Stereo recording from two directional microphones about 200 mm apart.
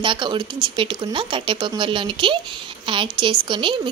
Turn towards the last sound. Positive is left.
turn(degrees=-25)  # may be behind; listen again after turning